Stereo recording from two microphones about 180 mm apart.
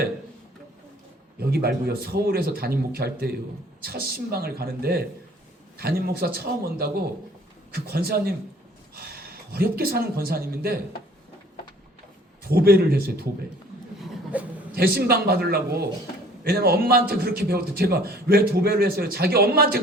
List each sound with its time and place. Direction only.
1.4 s a man's voice: 60° right (ahead or behind)
12.4 s a man's voice: 55° right (ahead or behind)
14.0 s a sound: 10° right (ahead or behind)
14.8 s a man's voice: 60° right (ahead or behind)